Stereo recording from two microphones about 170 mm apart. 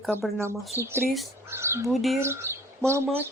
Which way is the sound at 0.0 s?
Centre (ahead or behind).